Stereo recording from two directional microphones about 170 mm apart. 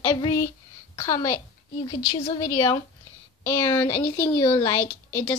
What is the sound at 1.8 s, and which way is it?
Speech, 30° left (ahead or behind).